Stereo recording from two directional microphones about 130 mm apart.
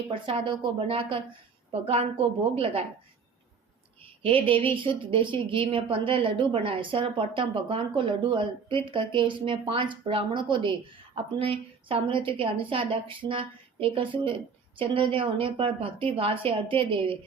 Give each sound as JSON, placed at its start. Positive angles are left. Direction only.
{"t": 0.1, "sound": "a woman's voice", "side_deg": -40}
{"t": 4.2, "sound": "a woman's voice", "side_deg": -45}